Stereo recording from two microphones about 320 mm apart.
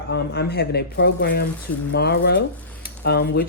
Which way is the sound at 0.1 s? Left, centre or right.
Left.